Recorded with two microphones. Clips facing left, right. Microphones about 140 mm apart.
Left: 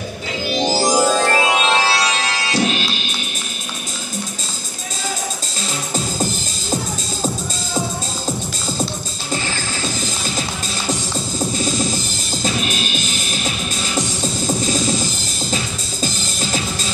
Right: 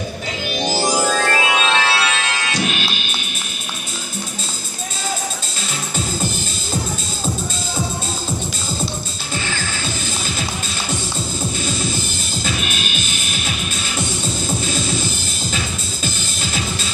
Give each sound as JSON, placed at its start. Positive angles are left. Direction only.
{"t": 0.5, "sound": "music", "side_deg": 30}
{"t": 12.4, "sound": "music", "side_deg": 35}